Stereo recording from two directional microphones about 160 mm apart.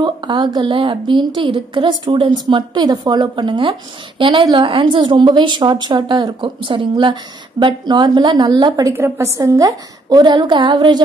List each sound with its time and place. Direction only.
0.0 s a woman's voice: 30° right (ahead or behind)